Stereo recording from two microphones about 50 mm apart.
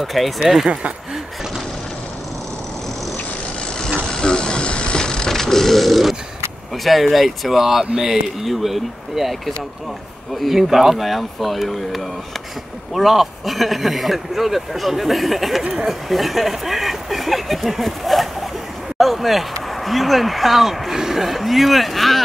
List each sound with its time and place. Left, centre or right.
0.0 s speech: centre
4.1 s a sound: centre
6.8 s speech: centre
15.6 s speech: centre
15.9 s speech: centre
18.9 s a sound: centre
19.8 s speech: centre